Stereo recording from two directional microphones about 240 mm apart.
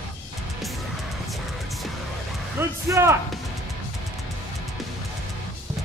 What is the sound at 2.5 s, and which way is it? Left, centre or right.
Speech, centre.